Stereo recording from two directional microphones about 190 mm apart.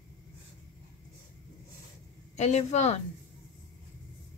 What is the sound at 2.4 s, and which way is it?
Speech, 35° left (ahead or behind).